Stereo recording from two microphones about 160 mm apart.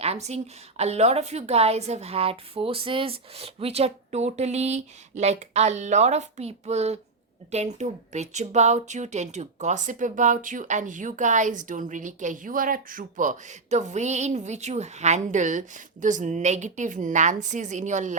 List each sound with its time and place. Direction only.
0.0 s speech: 40° right (ahead or behind)